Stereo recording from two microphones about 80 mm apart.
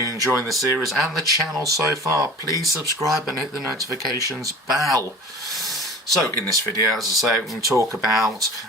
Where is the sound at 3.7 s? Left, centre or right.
Right.